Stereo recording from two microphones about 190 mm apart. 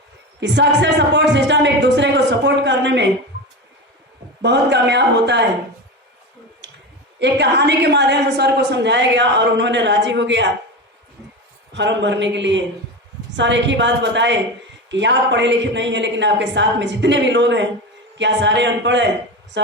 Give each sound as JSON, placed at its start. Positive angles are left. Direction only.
{"t": 0.3, "sound": "a woman's voice", "side_deg": -65}
{"t": 4.4, "sound": "speech", "side_deg": -65}
{"t": 7.2, "sound": "a woman's voice", "side_deg": -65}
{"t": 11.7, "sound": "a woman's voice", "side_deg": -70}